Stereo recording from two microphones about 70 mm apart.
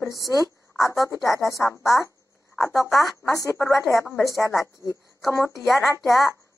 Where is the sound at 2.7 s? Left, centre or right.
Centre.